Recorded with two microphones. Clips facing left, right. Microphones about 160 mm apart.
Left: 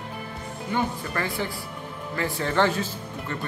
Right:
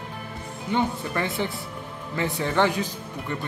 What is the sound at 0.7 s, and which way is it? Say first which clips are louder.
Speech: right 2 dB; 20° right (ahead or behind).